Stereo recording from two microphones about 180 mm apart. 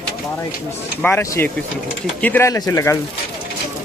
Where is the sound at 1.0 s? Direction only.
15° left (ahead or behind).